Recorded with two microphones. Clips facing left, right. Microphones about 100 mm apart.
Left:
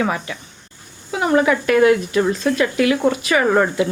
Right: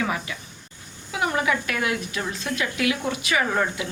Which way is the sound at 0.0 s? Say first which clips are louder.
Left 6 dB; 45° left (ahead or behind).